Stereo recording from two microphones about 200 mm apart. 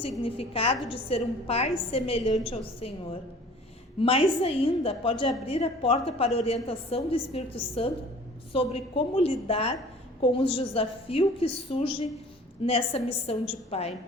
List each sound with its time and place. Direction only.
0.2 s a woman's voice: 30° left (ahead or behind)